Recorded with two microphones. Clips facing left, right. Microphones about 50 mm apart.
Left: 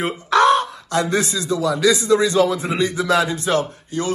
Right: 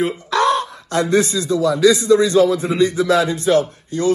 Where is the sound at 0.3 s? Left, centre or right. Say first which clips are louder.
Left 4 dB; left.